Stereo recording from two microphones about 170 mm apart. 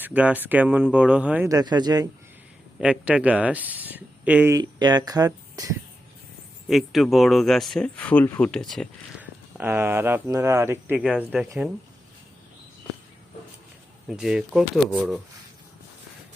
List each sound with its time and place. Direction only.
0.0 s speech: 10° right (ahead or behind)
1.5 s speech: 25° right (ahead or behind)
2.7 s speech: 5° right (ahead or behind)
4.5 s speech: 25° right (ahead or behind)
6.7 s speech: centre (ahead or behind)
9.6 s speech: 10° right (ahead or behind)
14.1 s speech: 5° right (ahead or behind)